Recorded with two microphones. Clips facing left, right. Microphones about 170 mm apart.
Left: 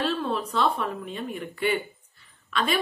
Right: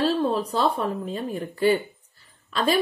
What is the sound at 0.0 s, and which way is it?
A woman's voice, 35° right (ahead or behind).